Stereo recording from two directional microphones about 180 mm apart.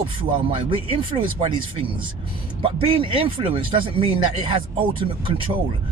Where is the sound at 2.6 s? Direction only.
30° right (ahead or behind).